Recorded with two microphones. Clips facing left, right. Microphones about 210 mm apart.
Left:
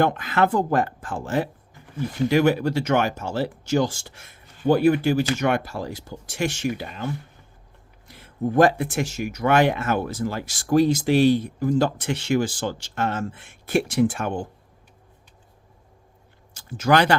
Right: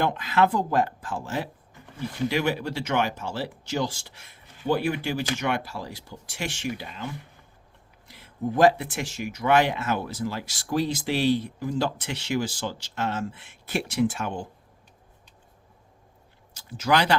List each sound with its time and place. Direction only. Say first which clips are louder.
0.0 s speech: left 2 dB; 50° left (ahead or behind)
16.6 s speech: left 4 dB; 50° left (ahead or behind)